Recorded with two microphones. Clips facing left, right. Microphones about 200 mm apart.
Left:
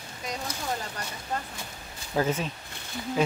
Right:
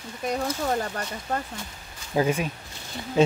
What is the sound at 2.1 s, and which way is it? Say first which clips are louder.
Speech: right 3 dB; 15° right (ahead or behind).